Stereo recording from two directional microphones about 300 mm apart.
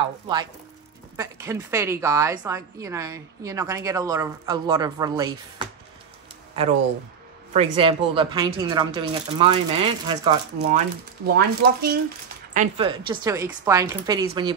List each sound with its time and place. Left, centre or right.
0.0 s speech: centre
7.5 s speech: centre
11.3 s speech: right
12.5 s speech: centre